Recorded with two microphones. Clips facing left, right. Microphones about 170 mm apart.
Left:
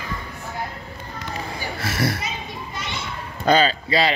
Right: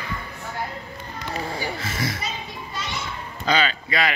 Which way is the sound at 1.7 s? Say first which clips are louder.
Left 4 dB; 65° left (ahead or behind).